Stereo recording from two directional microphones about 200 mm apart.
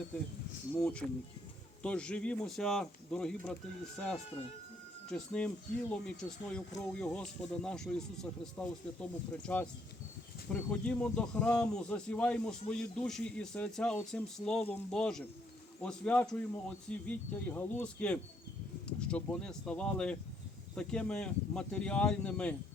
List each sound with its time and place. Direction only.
0.7 s speech: 5° left (ahead or behind)
4.3 s speech: 30° left (ahead or behind)
5.1 s speech: 5° left (ahead or behind)